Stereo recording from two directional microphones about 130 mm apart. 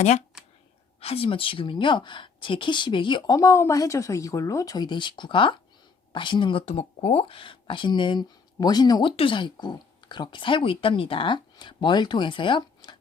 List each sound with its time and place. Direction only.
0.9 s speech: 50° left (ahead or behind)
3.3 s speech: 25° left (ahead or behind)